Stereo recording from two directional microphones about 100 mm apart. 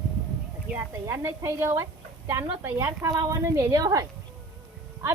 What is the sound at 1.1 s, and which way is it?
A woman's voice, 30° right (ahead or behind).